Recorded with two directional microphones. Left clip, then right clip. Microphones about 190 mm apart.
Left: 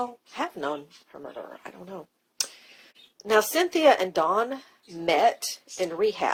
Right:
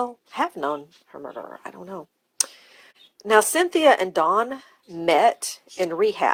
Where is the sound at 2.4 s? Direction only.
40° right (ahead or behind).